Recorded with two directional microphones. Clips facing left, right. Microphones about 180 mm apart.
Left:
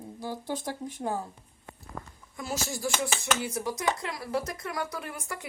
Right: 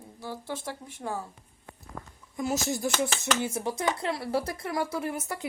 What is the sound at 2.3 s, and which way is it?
Speech, 20° right (ahead or behind).